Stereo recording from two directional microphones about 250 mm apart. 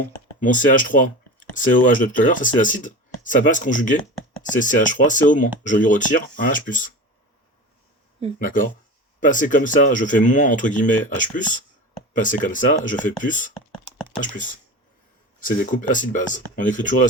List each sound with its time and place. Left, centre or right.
0.3 s speech: left
8.4 s speech: left